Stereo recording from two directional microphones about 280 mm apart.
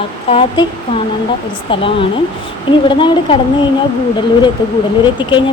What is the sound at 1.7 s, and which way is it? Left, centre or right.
Speech, centre.